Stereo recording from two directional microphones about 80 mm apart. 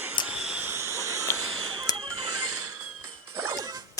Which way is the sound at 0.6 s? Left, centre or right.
Right.